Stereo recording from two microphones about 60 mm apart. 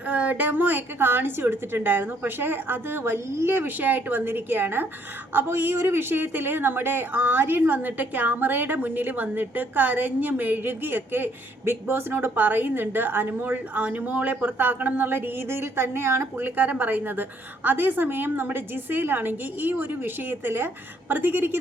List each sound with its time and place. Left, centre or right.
0.1 s speech: right
16.6 s speech: right